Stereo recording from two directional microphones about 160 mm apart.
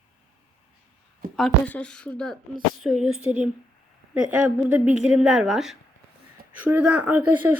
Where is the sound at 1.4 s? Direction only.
10° left (ahead or behind).